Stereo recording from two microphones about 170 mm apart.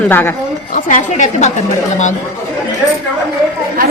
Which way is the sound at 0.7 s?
50° left (ahead or behind).